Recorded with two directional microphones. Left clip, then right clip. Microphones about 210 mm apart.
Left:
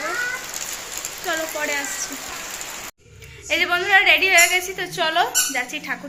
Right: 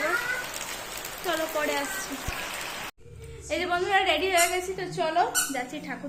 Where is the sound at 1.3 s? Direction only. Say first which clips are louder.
Left 3 dB; centre (ahead or behind).